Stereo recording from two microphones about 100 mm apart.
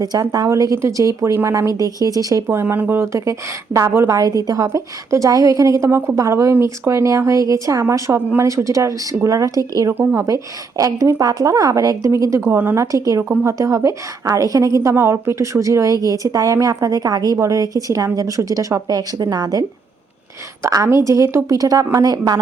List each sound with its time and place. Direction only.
0.0 s a woman's voice: 40° right (ahead or behind)
2.5 s a woman's voice: 20° right (ahead or behind)
9.9 s a woman's voice: 25° right (ahead or behind)
12.4 s a woman's voice: 20° right (ahead or behind); by 13.2 s 35° right (ahead or behind)
13.2 s a woman's voice: 25° right (ahead or behind); by 22.4 s 40° right (ahead or behind)